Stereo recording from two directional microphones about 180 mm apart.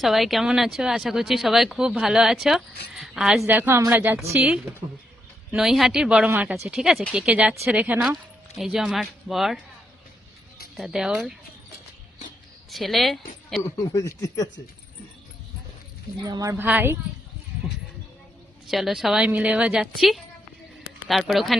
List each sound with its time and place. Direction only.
0.0 s a woman's voice: centre (ahead or behind)
10.8 s speech: 5° right (ahead or behind)
12.7 s speech: centre (ahead or behind)
13.6 s speech: 15° left (ahead or behind)
16.2 s a woman's voice: 20° right (ahead or behind)
18.7 s a man's voice: centre (ahead or behind)